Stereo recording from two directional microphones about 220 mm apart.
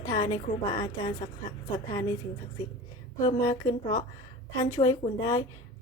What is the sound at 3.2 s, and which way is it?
A woman's voice, 20° left (ahead or behind).